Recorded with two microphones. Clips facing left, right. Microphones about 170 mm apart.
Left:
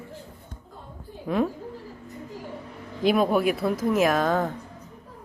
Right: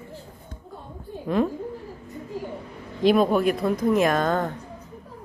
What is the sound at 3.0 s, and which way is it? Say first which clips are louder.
Speech: right 2 dB; 5° left (ahead or behind).